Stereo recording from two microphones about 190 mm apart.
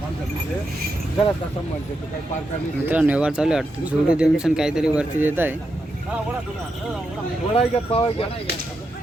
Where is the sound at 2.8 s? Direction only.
10° right (ahead or behind).